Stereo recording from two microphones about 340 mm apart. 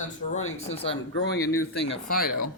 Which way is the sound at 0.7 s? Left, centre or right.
Centre.